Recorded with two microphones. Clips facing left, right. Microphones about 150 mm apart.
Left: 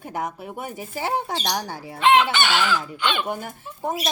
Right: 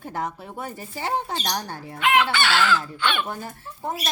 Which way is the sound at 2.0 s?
25° left (ahead or behind).